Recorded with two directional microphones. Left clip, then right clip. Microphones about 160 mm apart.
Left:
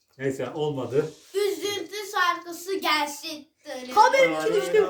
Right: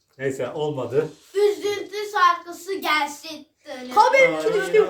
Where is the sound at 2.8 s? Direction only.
55° left (ahead or behind).